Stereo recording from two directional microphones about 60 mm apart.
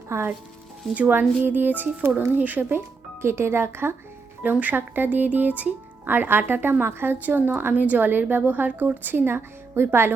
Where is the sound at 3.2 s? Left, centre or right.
Right.